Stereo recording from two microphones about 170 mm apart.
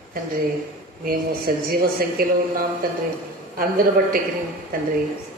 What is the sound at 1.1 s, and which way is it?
A woman's voice, 60° right (ahead or behind).